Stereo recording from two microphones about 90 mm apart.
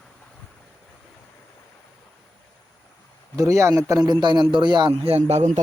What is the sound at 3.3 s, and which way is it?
A man's voice, 40° right (ahead or behind).